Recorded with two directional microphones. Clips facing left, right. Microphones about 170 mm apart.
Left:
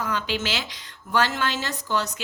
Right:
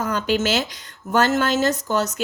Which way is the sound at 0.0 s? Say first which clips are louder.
Right 6 dB; 45° right (ahead or behind).